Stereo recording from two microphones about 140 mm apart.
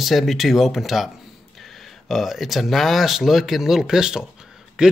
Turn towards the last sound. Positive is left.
turn(degrees=-5)  # may be behind; listen again after turning